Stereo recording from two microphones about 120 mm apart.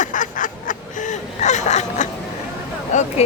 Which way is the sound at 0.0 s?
90° left.